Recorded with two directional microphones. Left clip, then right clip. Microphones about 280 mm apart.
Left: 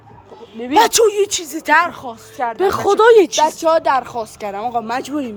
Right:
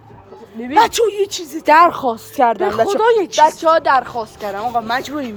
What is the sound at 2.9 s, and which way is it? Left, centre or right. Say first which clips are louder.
Speech: left 6 dB; left.